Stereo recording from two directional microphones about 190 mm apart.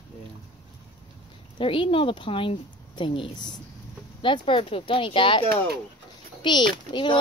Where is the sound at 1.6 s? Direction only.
25° left (ahead or behind).